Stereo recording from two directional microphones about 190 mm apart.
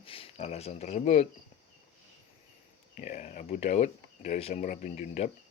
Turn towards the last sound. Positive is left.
turn(degrees=35)  # may be behind; listen again after turning